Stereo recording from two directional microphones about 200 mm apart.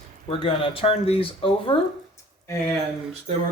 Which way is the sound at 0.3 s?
25° left (ahead or behind).